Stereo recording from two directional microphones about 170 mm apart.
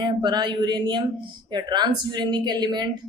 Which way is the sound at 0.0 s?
25° right (ahead or behind).